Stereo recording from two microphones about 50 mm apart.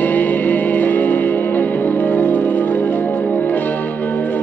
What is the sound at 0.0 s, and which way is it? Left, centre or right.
Music, left.